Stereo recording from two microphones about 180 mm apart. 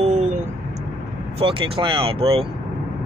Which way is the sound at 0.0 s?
40° right (ahead or behind).